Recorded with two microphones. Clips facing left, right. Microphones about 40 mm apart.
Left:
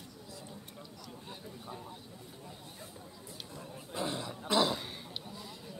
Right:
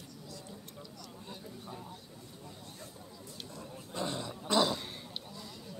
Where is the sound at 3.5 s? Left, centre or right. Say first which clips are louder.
Left 1 dB; centre.